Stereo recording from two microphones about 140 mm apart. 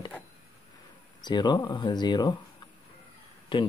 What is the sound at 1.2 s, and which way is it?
Speech, 30° left (ahead or behind).